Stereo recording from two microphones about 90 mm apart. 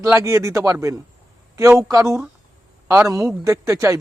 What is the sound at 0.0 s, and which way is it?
A man's voice, 35° right (ahead or behind).